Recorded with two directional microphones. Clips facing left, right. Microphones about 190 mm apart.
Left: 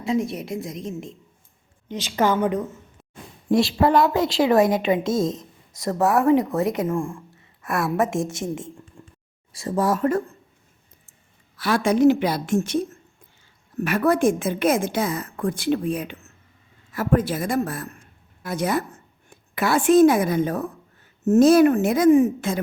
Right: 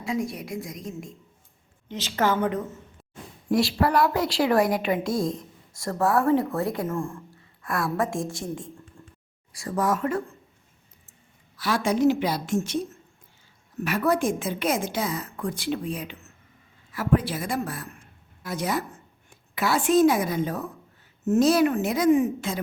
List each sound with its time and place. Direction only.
0.0 s a woman's voice: 25° left (ahead or behind); by 10.2 s 40° left (ahead or behind)
11.5 s a woman's voice: 60° left (ahead or behind)